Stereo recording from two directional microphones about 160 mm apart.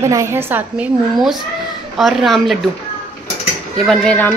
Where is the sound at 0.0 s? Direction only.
20° right (ahead or behind).